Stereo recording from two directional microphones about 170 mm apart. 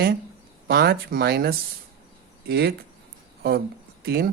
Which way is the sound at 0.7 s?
70° right (ahead or behind).